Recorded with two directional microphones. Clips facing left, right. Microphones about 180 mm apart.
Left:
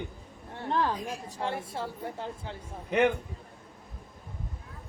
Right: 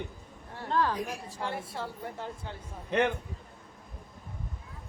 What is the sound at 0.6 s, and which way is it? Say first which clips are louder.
A woman's voice: even; 20° left (ahead or behind).